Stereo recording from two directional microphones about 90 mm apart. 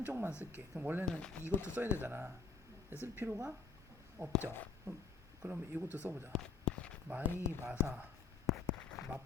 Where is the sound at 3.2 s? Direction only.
35° right (ahead or behind).